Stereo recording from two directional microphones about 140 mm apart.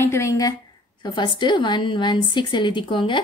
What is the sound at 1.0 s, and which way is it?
A woman's voice, 35° left (ahead or behind).